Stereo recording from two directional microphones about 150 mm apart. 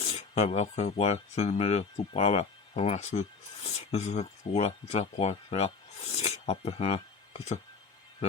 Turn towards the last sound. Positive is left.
turn(degrees=45)  # may be behind; listen again after turning